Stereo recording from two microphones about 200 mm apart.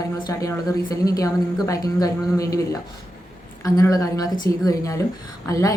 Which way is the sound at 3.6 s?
15° left (ahead or behind).